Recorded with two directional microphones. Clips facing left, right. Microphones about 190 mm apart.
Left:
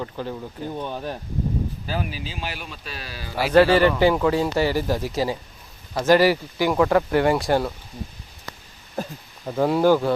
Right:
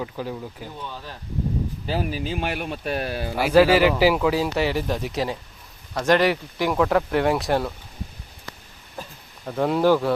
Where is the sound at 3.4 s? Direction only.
10° right (ahead or behind).